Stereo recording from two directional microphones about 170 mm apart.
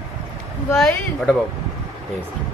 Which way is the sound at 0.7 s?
Centre (ahead or behind).